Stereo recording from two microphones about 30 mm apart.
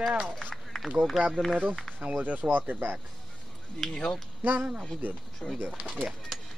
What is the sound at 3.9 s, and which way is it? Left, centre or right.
Speech, left.